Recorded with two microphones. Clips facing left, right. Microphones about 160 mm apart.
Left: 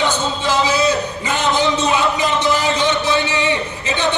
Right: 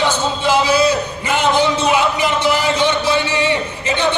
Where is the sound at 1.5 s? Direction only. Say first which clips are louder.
Right 1 dB; 15° left (ahead or behind).